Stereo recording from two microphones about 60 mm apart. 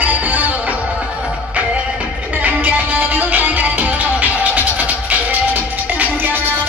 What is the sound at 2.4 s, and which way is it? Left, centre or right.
Music, right.